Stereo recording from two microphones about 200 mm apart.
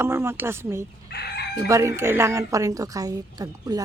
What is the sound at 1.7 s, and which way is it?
A woman's voice, 15° right (ahead or behind).